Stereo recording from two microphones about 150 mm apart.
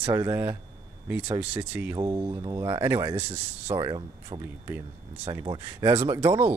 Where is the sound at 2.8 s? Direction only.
15° right (ahead or behind).